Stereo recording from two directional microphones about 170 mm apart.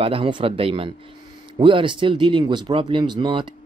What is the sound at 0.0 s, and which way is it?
Speech, 30° right (ahead or behind).